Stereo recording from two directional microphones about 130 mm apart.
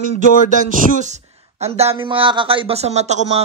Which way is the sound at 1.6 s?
55° right (ahead or behind).